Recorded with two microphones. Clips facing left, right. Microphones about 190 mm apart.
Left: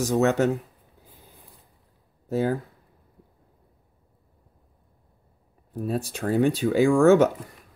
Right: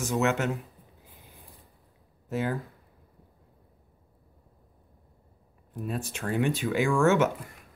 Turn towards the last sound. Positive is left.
turn(degrees=35)  # may be behind; listen again after turning